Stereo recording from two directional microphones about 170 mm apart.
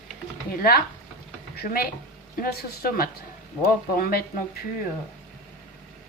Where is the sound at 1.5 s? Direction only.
60° left (ahead or behind).